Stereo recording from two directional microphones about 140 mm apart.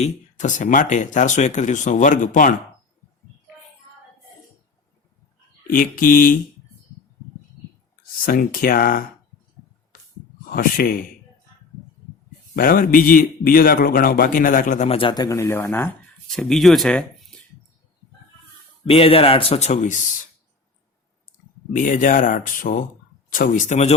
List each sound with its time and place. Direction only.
0.0 s speech: 60° left (ahead or behind)
5.7 s speech: 80° left
8.2 s a man's voice: 90° left
10.5 s a man's voice: 90° left
12.5 s a man's voice: 90° left; by 14.8 s 70° left (ahead or behind)
14.8 s speech: 40° left (ahead or behind); by 15.9 s 15° left (ahead or behind)
16.3 s speech: 5° left (ahead or behind)
18.9 s speech: 45° left (ahead or behind); by 20.0 s 60° left (ahead or behind)
21.7 s speech: 70° left (ahead or behind)